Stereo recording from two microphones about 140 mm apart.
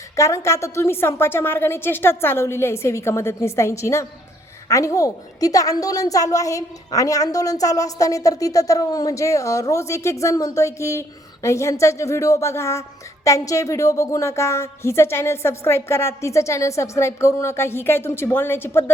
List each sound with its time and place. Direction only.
0.2 s a woman's voice: 20° left (ahead or behind)